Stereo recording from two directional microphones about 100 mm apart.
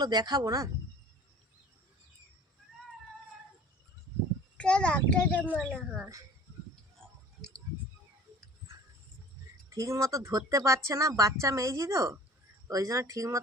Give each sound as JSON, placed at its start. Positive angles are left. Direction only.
{"t": 0.0, "sound": "speech", "side_deg": -45}
{"t": 4.5, "sound": "a child's voice", "side_deg": 10}
{"t": 5.5, "sound": "speech", "side_deg": 0}
{"t": 7.0, "sound": "chewing", "side_deg": 5}
{"t": 9.6, "sound": "a woman's voice", "side_deg": -30}